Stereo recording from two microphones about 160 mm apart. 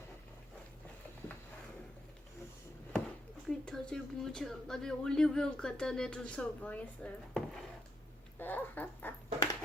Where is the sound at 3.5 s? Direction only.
5° left (ahead or behind).